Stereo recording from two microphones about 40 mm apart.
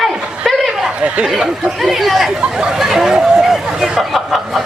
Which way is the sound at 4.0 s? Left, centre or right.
Centre.